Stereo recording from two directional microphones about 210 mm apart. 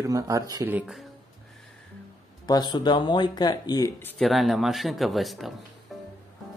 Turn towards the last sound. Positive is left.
turn(degrees=0)  # may be behind; listen again after turning